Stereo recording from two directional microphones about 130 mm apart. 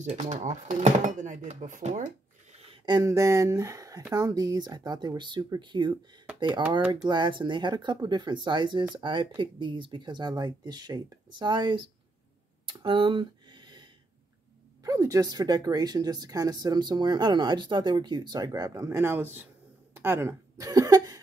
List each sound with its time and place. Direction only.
0.4 s speech: 65° right (ahead or behind)
2.6 s a sound: 40° right (ahead or behind)
3.1 s speech: 25° right (ahead or behind)
7.1 s speech: 35° right (ahead or behind)
12.6 s a sound: 40° right (ahead or behind)
14.8 s speech: 25° right (ahead or behind)